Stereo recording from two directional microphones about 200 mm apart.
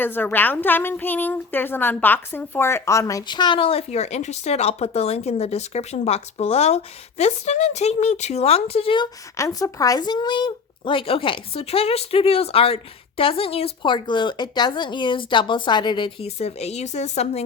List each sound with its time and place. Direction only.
0.0 s a woman's voice: 10° left (ahead or behind); by 17.4 s 35° left (ahead or behind)